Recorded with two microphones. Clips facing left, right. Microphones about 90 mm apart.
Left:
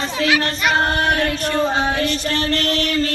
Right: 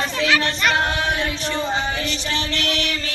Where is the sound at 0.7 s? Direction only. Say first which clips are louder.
Left 4 dB; 45° left (ahead or behind).